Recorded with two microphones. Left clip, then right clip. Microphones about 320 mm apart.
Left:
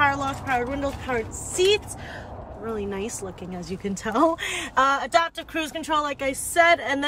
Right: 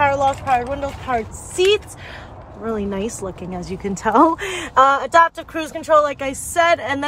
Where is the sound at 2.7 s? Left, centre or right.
Centre.